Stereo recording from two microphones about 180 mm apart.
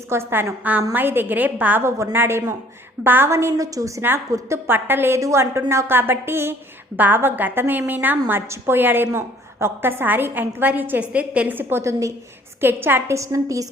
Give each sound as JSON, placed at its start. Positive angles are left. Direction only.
{"t": 0.1, "sound": "a woman's voice", "side_deg": -15}